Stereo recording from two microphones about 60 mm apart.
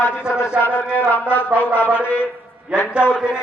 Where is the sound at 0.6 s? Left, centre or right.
Left.